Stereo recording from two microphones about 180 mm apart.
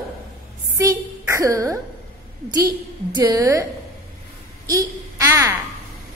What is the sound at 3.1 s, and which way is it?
Speech, 20° right (ahead or behind).